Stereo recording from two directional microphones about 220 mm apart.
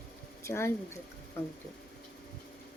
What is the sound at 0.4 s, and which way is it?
Speech, 10° left (ahead or behind).